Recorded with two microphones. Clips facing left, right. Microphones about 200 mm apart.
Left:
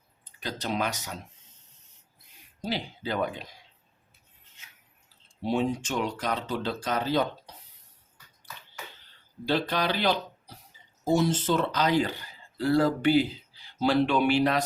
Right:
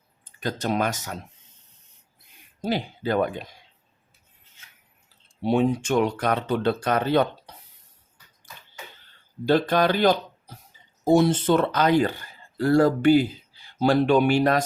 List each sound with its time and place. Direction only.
0.3 s speech: 45° right (ahead or behind)
2.6 s speech: 50° right (ahead or behind)
5.4 s speech: 60° right (ahead or behind)
9.5 s speech: 50° right (ahead or behind)
11.0 s speech: 60° right (ahead or behind)